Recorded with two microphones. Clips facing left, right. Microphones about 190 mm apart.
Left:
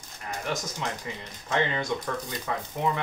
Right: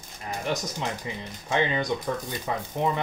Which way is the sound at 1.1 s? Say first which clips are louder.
Right 2 dB; 20° right (ahead or behind).